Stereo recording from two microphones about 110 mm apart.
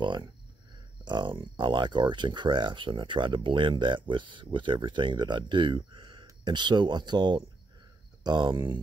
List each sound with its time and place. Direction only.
0.0 s speech: 45° right (ahead or behind)